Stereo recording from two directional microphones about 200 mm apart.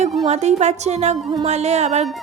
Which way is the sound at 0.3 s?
35° right (ahead or behind).